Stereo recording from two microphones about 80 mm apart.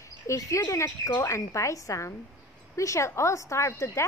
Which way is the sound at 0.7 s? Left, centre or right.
Left.